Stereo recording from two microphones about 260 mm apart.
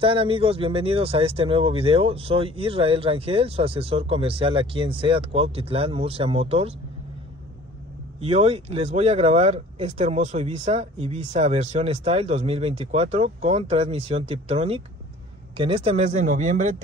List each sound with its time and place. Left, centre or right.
0.0 s speech: right
8.2 s speech: right